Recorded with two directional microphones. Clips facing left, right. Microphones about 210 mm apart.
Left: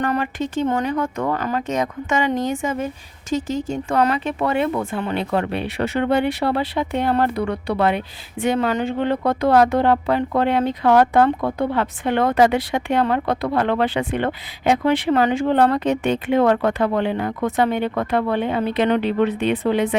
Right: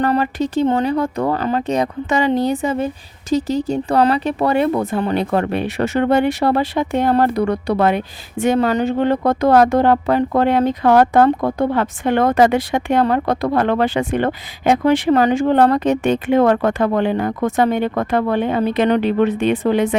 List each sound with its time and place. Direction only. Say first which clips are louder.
0.0 s speech: right 5 dB; 35° right (ahead or behind)